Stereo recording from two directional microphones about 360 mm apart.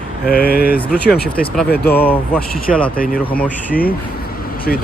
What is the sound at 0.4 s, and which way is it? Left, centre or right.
Speech, left.